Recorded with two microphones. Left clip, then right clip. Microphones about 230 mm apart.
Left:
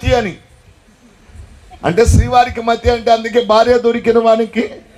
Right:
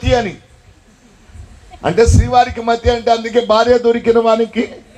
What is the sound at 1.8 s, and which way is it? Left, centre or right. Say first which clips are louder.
A man's voice: even; left.